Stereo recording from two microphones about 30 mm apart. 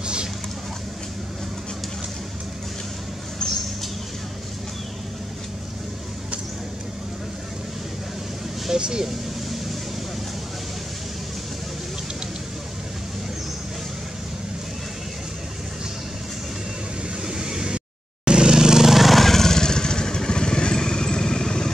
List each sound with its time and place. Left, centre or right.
0.0 s vehicle: right
8.7 s speech: right
17.2 s vehicle: right
19.0 s vehicle: centre